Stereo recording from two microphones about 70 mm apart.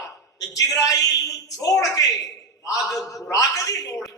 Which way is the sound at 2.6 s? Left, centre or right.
Left.